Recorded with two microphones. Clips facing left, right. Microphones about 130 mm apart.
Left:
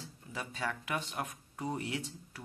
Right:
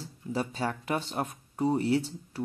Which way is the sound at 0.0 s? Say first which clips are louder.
Right 11 dB; 35° right (ahead or behind).